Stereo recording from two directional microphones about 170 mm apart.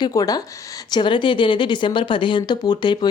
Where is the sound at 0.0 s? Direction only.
20° left (ahead or behind).